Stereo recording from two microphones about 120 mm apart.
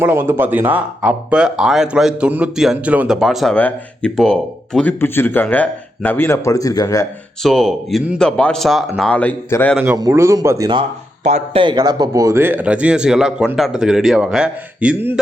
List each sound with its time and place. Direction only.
0.0 s speech: 20° right (ahead or behind)
3.2 s a man's voice: centre (ahead or behind); by 7.1 s 30° left (ahead or behind)
7.4 s a man's voice: 5° left (ahead or behind)
10.0 s speech: 25° right (ahead or behind)
11.5 s a man's voice: 40° right (ahead or behind); by 15.2 s 10° right (ahead or behind)